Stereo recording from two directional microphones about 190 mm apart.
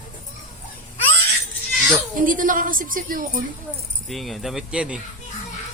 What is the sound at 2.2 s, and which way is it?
Speech, 45° right (ahead or behind).